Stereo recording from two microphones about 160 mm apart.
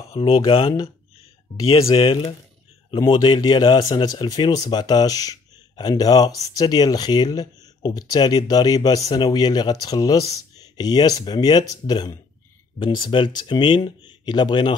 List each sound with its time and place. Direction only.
0.1 s speech: 35° left (ahead or behind)
1.9 s speech: 35° left (ahead or behind)